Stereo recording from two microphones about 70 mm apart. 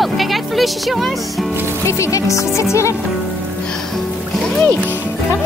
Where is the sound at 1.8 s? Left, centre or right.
Left.